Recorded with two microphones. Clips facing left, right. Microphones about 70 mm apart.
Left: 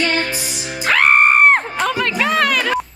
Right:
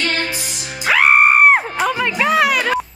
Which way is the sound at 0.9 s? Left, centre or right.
Centre.